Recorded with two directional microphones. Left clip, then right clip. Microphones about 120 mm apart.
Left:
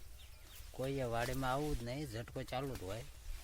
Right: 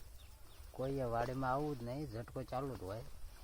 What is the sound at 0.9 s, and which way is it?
Speech, 10° left (ahead or behind).